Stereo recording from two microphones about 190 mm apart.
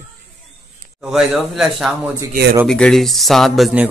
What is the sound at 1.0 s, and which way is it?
A man's voice, centre (ahead or behind).